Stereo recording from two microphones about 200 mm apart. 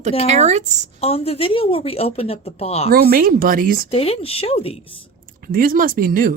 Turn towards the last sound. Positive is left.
turn(degrees=-45)  # may be behind; listen again after turning